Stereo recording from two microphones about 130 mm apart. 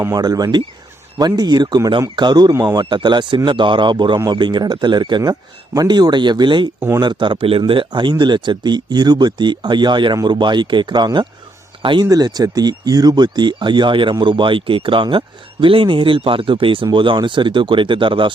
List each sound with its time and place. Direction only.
0.0 s speech: 30° right (ahead or behind)
6.7 s speech: 15° right (ahead or behind)
7.0 s speech: 35° right (ahead or behind)